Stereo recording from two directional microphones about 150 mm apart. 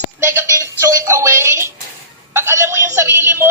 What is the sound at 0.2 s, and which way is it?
Music, 15° right (ahead or behind).